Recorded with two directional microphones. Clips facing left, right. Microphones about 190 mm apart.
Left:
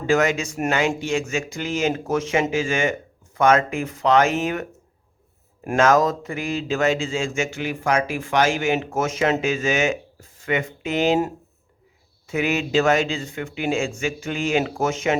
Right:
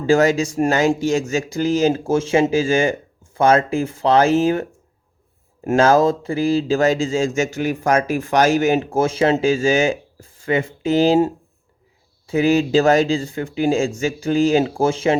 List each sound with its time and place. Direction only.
0.0 s speech: 35° right (ahead or behind)
5.6 s speech: 30° right (ahead or behind)
12.3 s speech: 35° right (ahead or behind)